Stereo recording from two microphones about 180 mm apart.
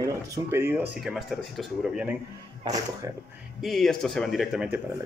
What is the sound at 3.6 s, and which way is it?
Speech, centre (ahead or behind).